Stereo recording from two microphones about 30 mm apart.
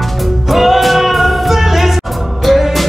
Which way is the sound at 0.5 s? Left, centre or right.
Centre.